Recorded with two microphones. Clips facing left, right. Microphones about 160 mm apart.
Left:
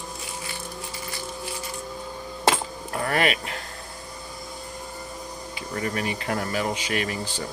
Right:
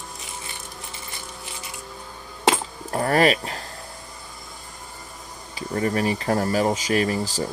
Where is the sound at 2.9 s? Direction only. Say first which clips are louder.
Right 5 dB; 35° right (ahead or behind).